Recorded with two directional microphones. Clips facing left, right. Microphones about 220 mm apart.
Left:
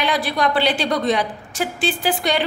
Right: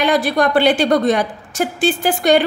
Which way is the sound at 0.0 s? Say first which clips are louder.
Right 5 dB; 50° right (ahead or behind).